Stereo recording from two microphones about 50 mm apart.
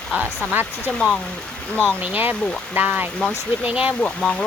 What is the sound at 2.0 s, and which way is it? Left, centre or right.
Speech, right.